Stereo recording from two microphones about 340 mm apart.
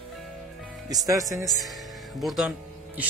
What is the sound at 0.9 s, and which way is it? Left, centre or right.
A man's voice, centre.